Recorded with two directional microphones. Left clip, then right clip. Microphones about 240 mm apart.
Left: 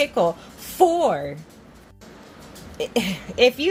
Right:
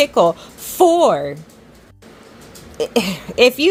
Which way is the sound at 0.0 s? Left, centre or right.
Right.